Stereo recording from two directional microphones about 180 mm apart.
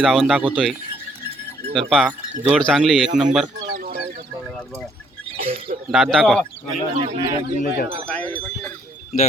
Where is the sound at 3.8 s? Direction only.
55° right (ahead or behind).